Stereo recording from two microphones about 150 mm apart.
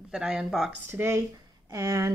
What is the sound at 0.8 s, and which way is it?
Speech, 15° right (ahead or behind).